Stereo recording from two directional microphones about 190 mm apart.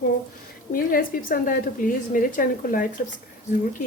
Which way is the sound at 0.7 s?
50° left (ahead or behind).